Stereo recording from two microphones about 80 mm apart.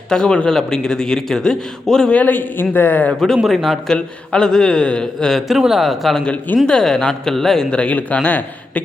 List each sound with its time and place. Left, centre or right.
0.1 s a man's voice: centre; by 3.1 s left
3.1 s a man's voice: centre
5.5 s speech: centre
6.2 s a man's voice: centre